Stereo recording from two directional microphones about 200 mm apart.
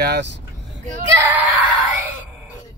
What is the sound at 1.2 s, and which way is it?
Speech, 10° right (ahead or behind).